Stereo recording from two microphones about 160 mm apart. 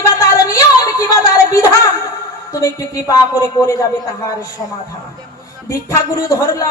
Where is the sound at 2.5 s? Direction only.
20° left (ahead or behind).